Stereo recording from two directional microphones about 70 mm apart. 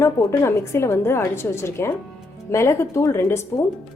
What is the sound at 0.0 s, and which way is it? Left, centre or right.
A woman's voice, left.